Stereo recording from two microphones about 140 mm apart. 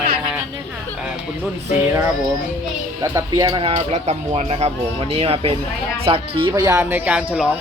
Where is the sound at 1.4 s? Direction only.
15° right (ahead or behind).